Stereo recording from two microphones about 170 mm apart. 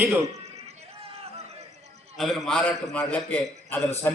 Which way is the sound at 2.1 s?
Centre (ahead or behind).